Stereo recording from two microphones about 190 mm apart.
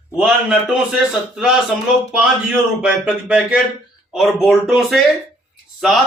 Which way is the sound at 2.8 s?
5° right (ahead or behind).